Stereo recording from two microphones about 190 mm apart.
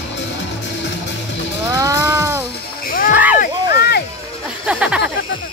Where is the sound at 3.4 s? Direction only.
55° left (ahead or behind).